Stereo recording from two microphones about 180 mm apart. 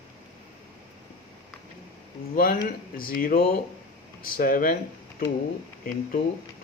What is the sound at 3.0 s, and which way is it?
Speech, 55° left (ahead or behind).